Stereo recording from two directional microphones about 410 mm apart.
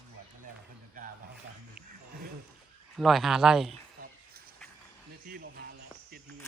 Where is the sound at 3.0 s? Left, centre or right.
Centre.